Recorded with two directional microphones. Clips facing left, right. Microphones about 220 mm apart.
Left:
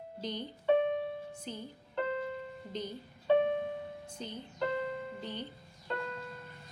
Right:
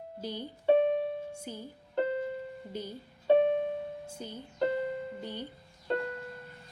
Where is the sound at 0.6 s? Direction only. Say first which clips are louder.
Right 4 dB; 35° right (ahead or behind).